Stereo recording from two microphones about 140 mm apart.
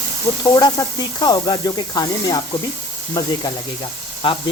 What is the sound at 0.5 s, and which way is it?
Speech, 30° left (ahead or behind).